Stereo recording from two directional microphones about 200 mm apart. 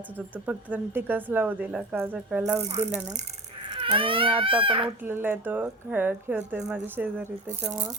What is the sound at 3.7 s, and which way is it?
Speech, 25° right (ahead or behind).